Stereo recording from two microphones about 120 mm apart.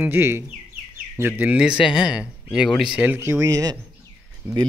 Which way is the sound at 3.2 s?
25° right (ahead or behind).